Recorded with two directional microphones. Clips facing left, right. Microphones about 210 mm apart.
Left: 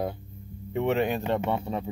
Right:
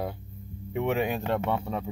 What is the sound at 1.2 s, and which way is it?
Speech, 15° left (ahead or behind).